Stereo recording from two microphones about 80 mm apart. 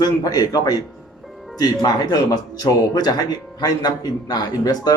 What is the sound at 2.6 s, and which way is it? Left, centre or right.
A man's voice, left.